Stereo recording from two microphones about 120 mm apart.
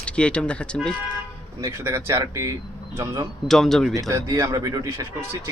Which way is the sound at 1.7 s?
20° right (ahead or behind).